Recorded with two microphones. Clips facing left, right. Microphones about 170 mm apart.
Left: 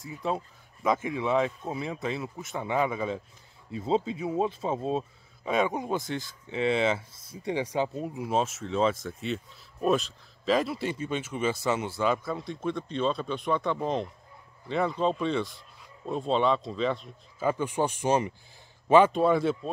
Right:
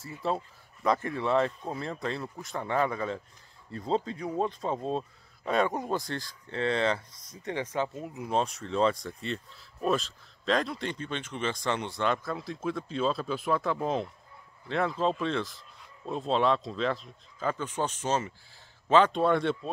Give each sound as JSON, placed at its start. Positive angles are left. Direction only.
{"t": 0.0, "sound": "speech", "side_deg": 0}
{"t": 8.0, "sound": "speech", "side_deg": 25}
{"t": 8.3, "sound": "speech", "side_deg": 5}
{"t": 17.5, "sound": "speech", "side_deg": 10}